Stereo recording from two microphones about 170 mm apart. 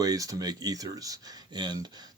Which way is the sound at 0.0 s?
20° right (ahead or behind).